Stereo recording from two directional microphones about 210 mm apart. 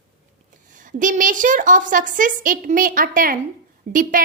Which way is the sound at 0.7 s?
40° right (ahead or behind).